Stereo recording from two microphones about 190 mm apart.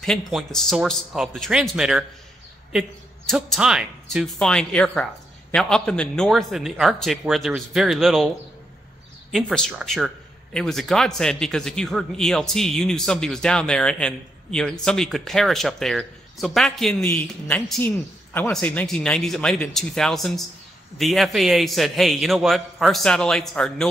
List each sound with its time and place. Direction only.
0.0 s a man's voice: 5° left (ahead or behind)
9.3 s a man's voice: centre (ahead or behind)